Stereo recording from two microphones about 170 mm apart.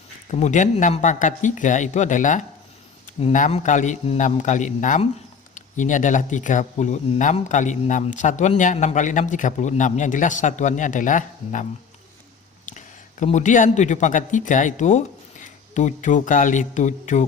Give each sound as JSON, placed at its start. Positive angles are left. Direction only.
{"t": 0.3, "sound": "speech", "side_deg": 45}
{"t": 12.6, "sound": "speech", "side_deg": 45}